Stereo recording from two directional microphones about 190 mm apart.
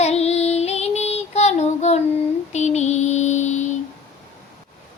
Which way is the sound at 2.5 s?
35° left (ahead or behind).